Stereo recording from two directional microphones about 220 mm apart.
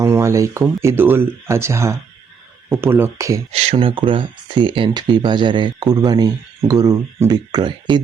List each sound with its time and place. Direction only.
0.0 s speech: 10° right (ahead or behind)
3.5 s speech: 25° right (ahead or behind)